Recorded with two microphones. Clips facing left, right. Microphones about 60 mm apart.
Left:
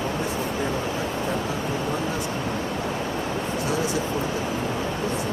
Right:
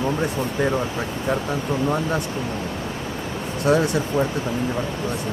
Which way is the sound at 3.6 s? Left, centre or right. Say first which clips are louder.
Right 9 dB; right.